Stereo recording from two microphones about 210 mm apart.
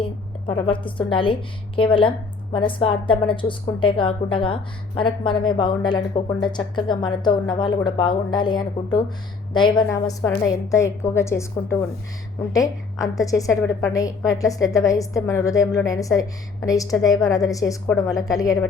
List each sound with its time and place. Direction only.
0.4 s a woman's voice: 25° left (ahead or behind)